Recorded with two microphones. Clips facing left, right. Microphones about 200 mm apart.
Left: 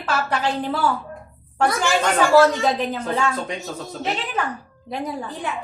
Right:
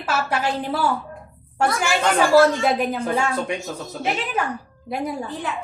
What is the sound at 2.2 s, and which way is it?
A woman's voice, 10° right (ahead or behind).